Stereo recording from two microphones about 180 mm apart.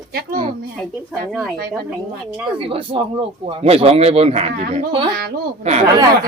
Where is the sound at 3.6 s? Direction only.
30° right (ahead or behind).